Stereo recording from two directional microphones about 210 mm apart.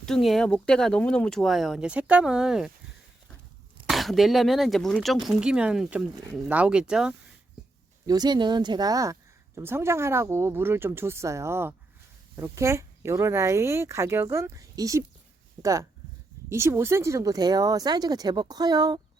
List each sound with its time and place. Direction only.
0.0 s speech: centre (ahead or behind)
3.8 s speech: centre (ahead or behind)
8.0 s speech: 20° right (ahead or behind)